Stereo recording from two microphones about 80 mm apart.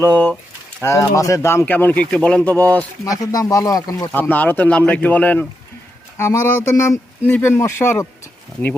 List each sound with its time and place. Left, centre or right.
0.0 s speech: left
0.8 s speech: left
2.0 s speech: centre
3.0 s speech: left
4.1 s speech: left
6.1 s speech: left